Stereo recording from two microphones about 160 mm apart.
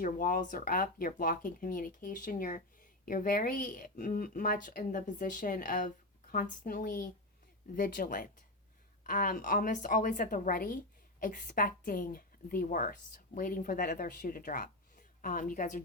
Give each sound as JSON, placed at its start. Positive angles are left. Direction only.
{"t": 0.0, "sound": "a woman's voice", "side_deg": 60}